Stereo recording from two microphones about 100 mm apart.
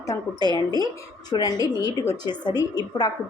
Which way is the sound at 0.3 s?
45° left (ahead or behind).